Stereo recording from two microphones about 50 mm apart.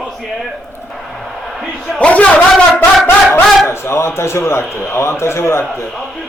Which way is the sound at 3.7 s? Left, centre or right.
Left.